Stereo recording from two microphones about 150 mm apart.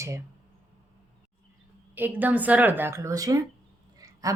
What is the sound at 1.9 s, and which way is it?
A woman's voice, 10° right (ahead or behind).